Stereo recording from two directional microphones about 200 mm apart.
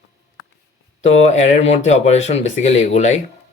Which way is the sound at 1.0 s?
35° left (ahead or behind).